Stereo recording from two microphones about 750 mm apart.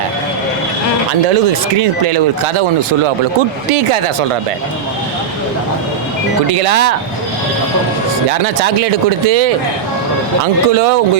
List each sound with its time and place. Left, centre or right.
1.3 s speech: right
6.5 s speech: right
8.3 s speech: right